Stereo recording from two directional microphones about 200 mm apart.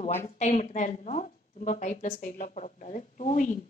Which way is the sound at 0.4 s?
35° left (ahead or behind).